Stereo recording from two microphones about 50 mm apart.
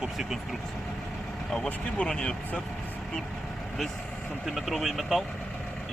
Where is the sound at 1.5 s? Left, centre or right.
Centre.